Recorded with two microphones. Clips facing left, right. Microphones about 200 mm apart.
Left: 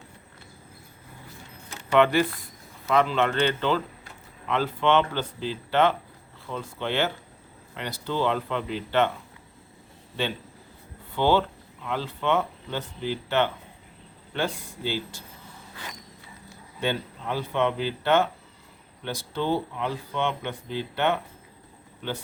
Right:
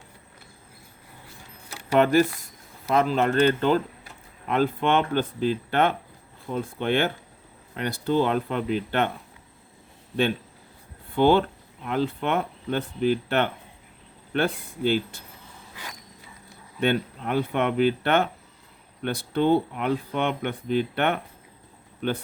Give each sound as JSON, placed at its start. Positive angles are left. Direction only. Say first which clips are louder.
{"t": 1.9, "sound": "speech", "louder": "right 1 dB", "side_deg": -45}
{"t": 11.1, "sound": "speech", "louder": "right 3 dB", "side_deg": -55}
{"t": 16.8, "sound": "speech", "louder": "right 5 dB", "side_deg": -60}